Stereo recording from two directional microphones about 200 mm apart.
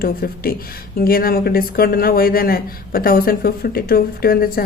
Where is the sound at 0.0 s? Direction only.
50° left (ahead or behind).